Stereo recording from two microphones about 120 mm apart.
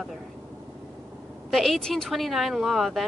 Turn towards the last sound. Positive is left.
turn(degrees=0)  # may be behind; listen again after turning